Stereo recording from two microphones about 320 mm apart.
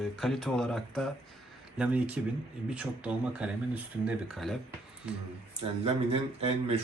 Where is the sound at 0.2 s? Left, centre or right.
Centre.